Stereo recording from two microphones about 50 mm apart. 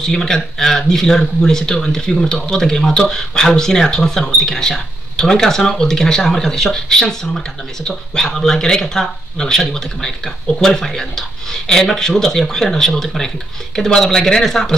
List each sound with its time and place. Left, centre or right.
0.0 s speech: centre